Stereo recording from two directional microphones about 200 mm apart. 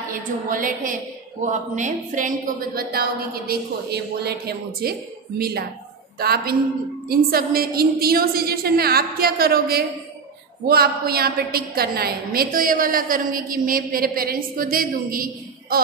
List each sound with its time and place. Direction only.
0.1 s a woman's voice: 45° right (ahead or behind)